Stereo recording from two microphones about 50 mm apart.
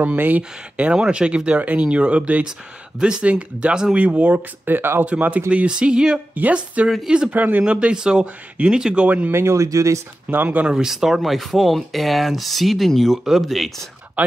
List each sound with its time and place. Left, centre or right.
0.0 s speech: right; by 3.9 s centre
3.9 s speech: right
4.6 s speech: right
5.0 s speech: right
5.7 s speech: centre
6.5 s speech: right
7.6 s speech: right
9.3 s speech: right
10.3 s speech: right
10.7 s speech: centre